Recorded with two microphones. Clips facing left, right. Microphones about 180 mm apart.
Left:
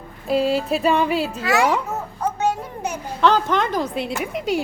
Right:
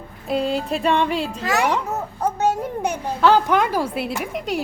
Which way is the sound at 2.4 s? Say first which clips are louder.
Right 3 dB; 45° right (ahead or behind).